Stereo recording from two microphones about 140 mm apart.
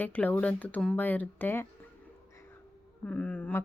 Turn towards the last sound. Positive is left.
turn(degrees=10)  # may be behind; listen again after turning